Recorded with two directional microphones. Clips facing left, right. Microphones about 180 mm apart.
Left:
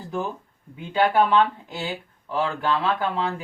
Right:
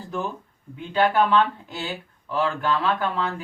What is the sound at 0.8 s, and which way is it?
Speech, 10° left (ahead or behind).